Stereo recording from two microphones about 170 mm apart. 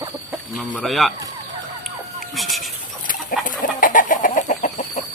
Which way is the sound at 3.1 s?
50° left (ahead or behind).